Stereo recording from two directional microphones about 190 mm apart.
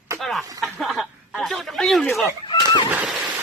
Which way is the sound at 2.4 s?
25° left (ahead or behind).